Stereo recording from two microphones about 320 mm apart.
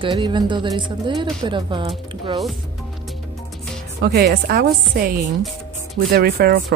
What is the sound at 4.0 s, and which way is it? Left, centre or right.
Speech, right.